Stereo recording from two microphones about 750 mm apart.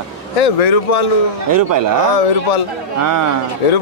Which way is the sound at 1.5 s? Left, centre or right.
Right.